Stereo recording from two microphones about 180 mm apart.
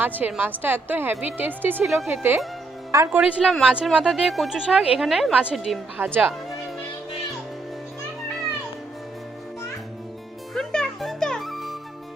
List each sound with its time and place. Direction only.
0.0 s a woman's voice: 10° right (ahead or behind)
3.2 s speech: centre (ahead or behind)
10.5 s music: 5° left (ahead or behind)